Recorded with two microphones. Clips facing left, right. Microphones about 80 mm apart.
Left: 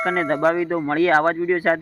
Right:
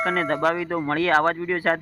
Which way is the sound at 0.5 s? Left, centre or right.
Left.